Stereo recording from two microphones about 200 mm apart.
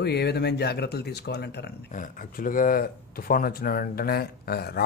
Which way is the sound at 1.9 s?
45° left (ahead or behind).